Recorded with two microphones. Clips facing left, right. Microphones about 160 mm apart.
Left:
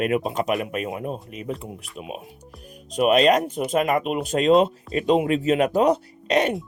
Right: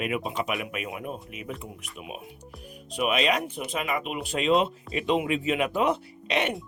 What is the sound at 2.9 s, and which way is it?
Speech, 45° left (ahead or behind).